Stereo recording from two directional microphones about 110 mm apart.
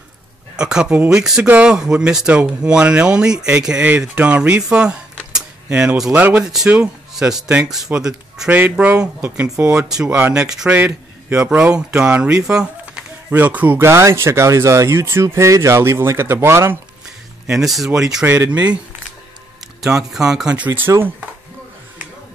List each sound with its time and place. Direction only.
0.6 s speech: 5° right (ahead or behind)
8.5 s speech: 15° right (ahead or behind)
10.7 s a man's voice: 20° right (ahead or behind)
12.4 s a sound: 5° right (ahead or behind)
13.3 s speech: 15° right (ahead or behind)
17.5 s speech: centre (ahead or behind)
18.2 s speech: 20° right (ahead or behind)
19.9 s speech: 5° right (ahead or behind)